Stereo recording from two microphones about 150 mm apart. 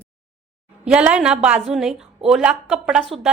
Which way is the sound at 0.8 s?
5° right (ahead or behind).